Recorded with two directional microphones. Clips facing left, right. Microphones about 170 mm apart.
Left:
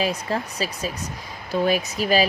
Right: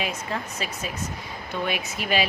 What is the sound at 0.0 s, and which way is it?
Speech, 35° left (ahead or behind).